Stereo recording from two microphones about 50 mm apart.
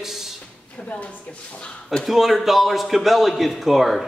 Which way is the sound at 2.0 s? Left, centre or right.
Centre.